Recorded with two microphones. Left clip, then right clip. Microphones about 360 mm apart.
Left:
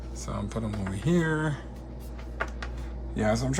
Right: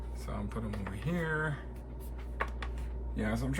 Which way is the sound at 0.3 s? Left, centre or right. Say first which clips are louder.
Left 6 dB; centre.